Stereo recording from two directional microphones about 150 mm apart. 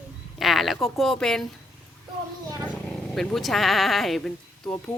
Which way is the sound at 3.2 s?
Centre (ahead or behind).